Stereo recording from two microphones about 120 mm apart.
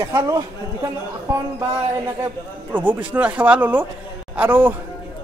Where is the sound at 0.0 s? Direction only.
25° right (ahead or behind).